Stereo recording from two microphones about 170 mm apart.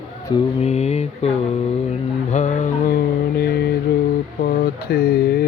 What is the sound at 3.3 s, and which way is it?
Mantra, 70° left (ahead or behind).